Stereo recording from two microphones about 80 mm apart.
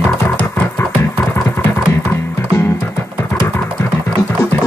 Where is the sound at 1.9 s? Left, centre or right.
Left.